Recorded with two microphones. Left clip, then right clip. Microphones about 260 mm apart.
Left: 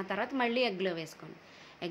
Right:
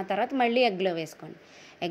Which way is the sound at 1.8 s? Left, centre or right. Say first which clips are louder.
Right 7 dB; centre.